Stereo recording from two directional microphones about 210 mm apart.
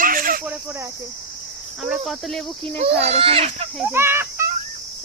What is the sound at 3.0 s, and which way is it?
Speech, 30° right (ahead or behind).